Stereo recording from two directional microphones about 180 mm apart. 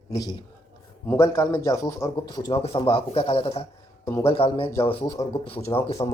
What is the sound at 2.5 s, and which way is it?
A man's voice, 35° left (ahead or behind).